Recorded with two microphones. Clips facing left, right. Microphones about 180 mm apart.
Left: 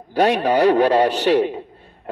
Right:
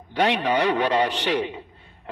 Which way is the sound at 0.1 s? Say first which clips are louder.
Left 5 dB; 35° left (ahead or behind).